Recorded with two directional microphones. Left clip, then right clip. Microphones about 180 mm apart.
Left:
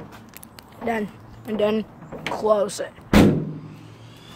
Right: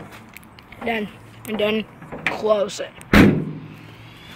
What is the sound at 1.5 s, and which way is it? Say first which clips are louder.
Speech: even; 10° left (ahead or behind).